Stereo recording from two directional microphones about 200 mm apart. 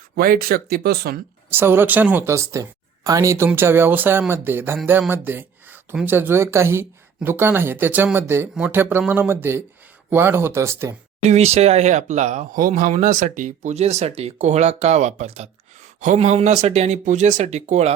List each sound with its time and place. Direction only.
0.2 s speech: 45° right (ahead or behind)
1.5 s speech: 10° right (ahead or behind)
11.3 s speech: 30° right (ahead or behind)